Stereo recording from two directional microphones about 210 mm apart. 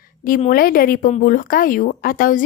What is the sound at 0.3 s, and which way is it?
A woman's voice, 40° left (ahead or behind).